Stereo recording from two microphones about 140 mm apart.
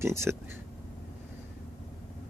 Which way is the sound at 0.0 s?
20° right (ahead or behind).